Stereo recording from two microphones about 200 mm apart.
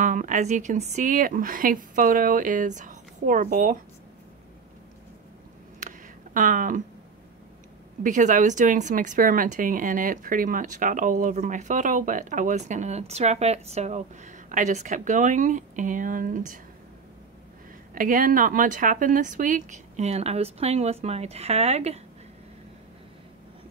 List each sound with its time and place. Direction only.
0.0 s speech: 40° right (ahead or behind)
5.8 s a sound: 40° right (ahead or behind)
8.0 s speech: 40° right (ahead or behind)
17.9 s speech: 45° right (ahead or behind)